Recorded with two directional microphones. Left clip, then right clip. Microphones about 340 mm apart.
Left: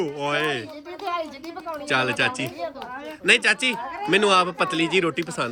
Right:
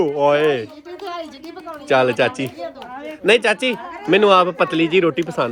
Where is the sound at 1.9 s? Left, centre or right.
Centre.